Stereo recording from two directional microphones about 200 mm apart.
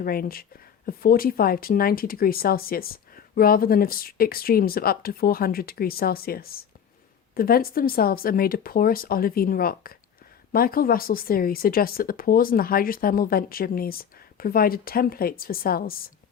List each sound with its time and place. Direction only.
0.0 s speech: 45° left (ahead or behind)